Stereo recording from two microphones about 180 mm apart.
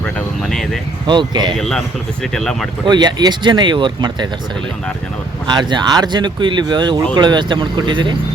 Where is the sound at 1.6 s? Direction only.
Centre (ahead or behind).